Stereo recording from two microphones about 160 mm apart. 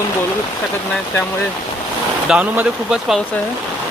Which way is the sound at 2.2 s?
10° right (ahead or behind).